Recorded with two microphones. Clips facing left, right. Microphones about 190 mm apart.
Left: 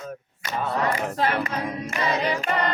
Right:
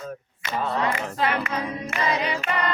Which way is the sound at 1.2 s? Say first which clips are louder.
Right 1 dB; 35° left (ahead or behind).